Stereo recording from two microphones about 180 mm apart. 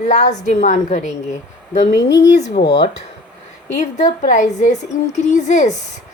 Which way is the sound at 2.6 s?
40° left (ahead or behind).